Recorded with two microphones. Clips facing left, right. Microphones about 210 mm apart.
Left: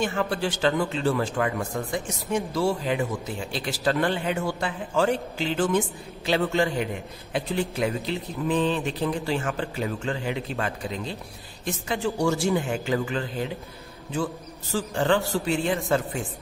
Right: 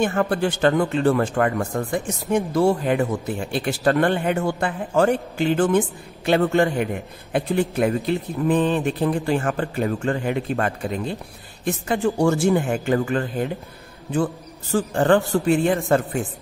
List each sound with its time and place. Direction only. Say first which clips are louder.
0.0 s speech: right 5 dB; 50° right (ahead or behind)